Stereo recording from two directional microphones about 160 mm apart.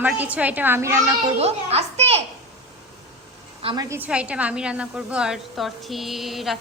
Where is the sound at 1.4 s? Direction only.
40° right (ahead or behind).